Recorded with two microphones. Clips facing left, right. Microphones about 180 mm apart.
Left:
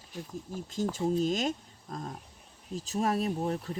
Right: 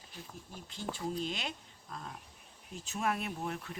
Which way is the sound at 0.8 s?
45° left (ahead or behind).